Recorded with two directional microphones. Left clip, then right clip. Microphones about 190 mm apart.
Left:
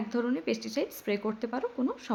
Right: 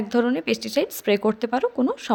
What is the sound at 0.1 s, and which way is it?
A woman's voice, 40° right (ahead or behind).